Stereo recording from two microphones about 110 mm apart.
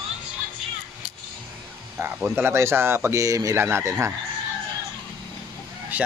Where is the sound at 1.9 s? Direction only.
20° right (ahead or behind).